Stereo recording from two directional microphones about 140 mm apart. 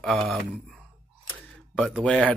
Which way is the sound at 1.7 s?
Centre (ahead or behind).